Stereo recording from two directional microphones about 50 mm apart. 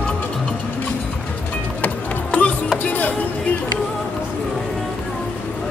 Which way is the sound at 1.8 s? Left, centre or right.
Left.